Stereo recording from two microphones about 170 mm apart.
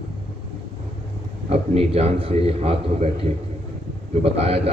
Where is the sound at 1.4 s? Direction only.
35° right (ahead or behind).